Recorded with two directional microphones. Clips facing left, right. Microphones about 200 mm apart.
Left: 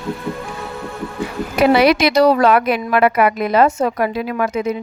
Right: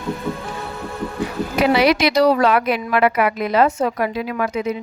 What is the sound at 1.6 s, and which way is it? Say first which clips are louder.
Speech: left 3 dB; 55° left (ahead or behind).